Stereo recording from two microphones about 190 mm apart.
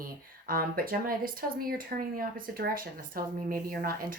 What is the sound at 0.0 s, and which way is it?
Speech, 50° right (ahead or behind).